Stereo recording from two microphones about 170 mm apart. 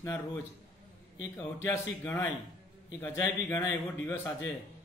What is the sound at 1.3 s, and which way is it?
A man's voice, 15° left (ahead or behind).